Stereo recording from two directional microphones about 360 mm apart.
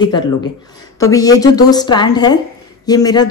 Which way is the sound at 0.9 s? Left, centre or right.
Centre.